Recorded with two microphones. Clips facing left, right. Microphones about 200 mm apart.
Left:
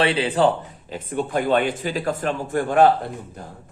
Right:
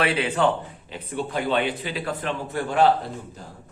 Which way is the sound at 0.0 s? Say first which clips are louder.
Left 3 dB; 30° left (ahead or behind).